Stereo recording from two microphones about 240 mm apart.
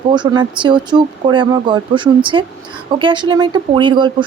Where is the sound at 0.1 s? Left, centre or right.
Centre.